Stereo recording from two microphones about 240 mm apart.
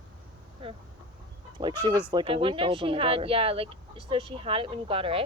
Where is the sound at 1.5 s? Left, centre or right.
Centre.